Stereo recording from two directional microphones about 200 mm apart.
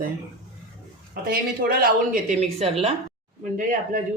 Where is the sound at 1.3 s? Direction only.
45° right (ahead or behind).